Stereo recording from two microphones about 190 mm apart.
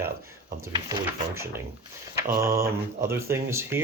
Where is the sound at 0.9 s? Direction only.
15° right (ahead or behind).